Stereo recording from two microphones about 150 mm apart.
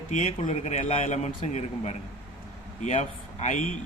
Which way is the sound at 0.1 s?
55° left (ahead or behind).